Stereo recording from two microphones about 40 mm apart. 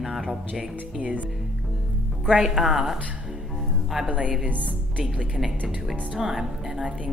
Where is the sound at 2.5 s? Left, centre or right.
Centre.